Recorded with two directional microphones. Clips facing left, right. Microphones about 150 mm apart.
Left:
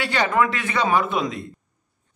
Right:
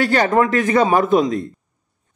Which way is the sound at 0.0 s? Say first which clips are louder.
Right 5 dB; 45° right (ahead or behind).